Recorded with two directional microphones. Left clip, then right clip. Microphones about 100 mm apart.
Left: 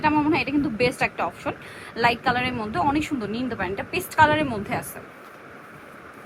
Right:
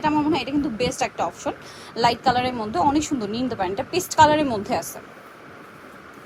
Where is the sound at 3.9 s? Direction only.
Centre (ahead or behind).